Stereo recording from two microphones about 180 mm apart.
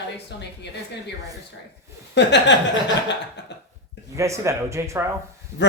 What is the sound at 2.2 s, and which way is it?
Speech, 70° left (ahead or behind).